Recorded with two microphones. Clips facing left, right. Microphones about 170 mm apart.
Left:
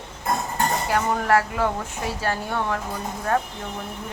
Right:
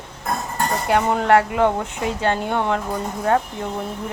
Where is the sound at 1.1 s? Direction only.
25° right (ahead or behind).